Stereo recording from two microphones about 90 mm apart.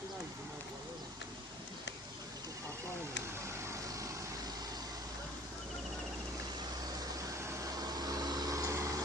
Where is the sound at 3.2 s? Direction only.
30° right (ahead or behind).